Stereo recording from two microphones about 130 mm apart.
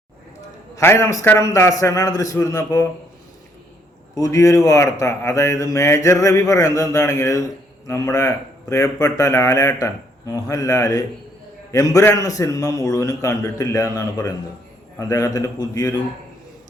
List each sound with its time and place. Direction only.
0.8 s a man's voice: 20° left (ahead or behind)
4.1 s a man's voice: 25° left (ahead or behind)